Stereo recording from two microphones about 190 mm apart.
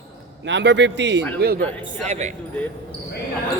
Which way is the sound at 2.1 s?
35° right (ahead or behind).